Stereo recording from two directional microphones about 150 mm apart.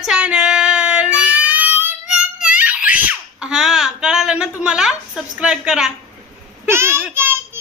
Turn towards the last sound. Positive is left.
turn(degrees=-15)  # may be behind; listen again after turning